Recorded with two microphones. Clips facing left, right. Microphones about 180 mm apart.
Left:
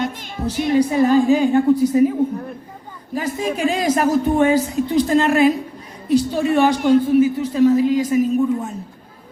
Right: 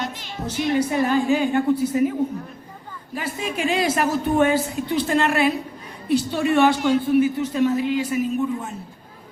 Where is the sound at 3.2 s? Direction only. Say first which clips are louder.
Left 5 dB; 40° left (ahead or behind).